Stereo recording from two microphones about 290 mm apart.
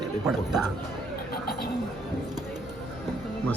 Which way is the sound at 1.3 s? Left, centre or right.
Left.